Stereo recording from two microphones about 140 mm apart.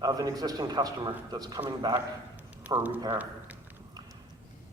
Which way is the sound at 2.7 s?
25° right (ahead or behind).